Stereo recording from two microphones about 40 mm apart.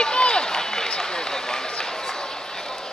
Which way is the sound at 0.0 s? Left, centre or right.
Left.